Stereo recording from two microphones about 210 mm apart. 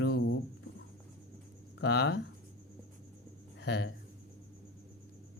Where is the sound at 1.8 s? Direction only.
50° left (ahead or behind).